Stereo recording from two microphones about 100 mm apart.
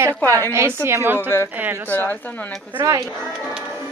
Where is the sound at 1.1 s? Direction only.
25° left (ahead or behind).